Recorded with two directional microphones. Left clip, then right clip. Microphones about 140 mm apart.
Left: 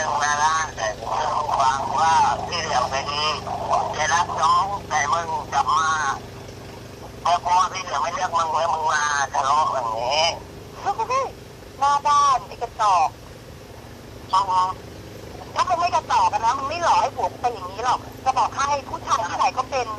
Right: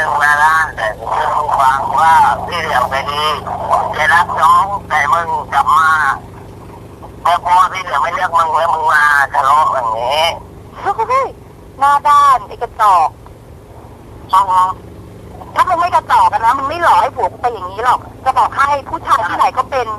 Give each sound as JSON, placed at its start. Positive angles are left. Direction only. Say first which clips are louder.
{"t": 0.0, "sound": "a sound", "louder": "right 10 dB", "side_deg": -35}
{"t": 7.2, "sound": "a man's voice", "louder": "right 8 dB", "side_deg": -35}
{"t": 14.3, "sound": "speech", "louder": "right 9 dB", "side_deg": -35}